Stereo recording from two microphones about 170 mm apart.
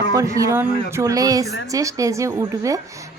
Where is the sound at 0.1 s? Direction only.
20° right (ahead or behind).